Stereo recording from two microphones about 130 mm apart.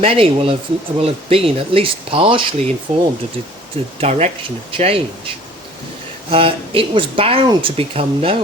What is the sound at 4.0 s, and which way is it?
Speech, 55° right (ahead or behind).